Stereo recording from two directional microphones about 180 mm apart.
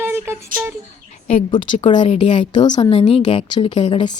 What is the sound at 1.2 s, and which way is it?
Speech, 40° left (ahead or behind).